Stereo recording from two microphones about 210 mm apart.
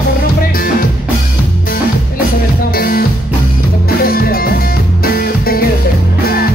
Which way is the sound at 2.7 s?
45° left (ahead or behind).